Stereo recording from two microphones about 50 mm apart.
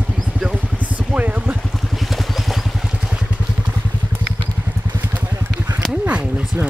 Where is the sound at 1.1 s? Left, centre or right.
Right.